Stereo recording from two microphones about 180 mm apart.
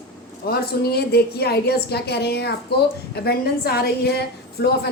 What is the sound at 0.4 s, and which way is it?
A woman's voice, 60° left (ahead or behind).